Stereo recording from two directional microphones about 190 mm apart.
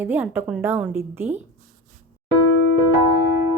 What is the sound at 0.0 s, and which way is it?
A woman's voice, 10° right (ahead or behind).